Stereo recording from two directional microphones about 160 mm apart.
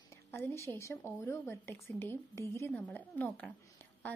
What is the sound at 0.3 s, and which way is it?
A woman's voice, 15° left (ahead or behind).